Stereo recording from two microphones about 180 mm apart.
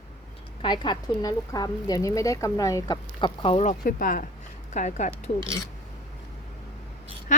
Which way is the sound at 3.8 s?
50° left (ahead or behind).